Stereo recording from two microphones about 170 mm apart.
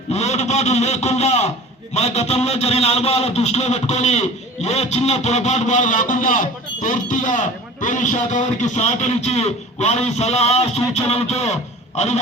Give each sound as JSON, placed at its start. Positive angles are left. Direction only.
{"t": 0.1, "sound": "a man's voice", "side_deg": 40}